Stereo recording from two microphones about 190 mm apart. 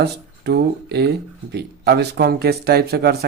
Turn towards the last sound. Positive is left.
turn(degrees=-55)  # may be behind; listen again after turning